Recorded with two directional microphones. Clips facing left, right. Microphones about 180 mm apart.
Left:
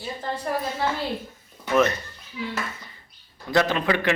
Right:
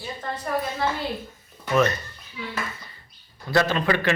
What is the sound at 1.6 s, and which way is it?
Speech, 15° left (ahead or behind).